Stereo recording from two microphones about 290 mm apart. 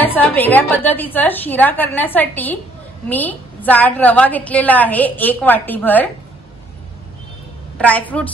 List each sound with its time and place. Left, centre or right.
0.0 s a woman's voice: centre
7.7 s a woman's voice: centre